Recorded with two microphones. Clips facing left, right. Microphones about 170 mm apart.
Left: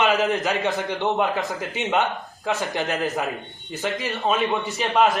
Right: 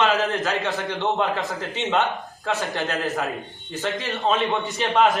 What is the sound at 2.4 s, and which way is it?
Speech, 15° left (ahead or behind).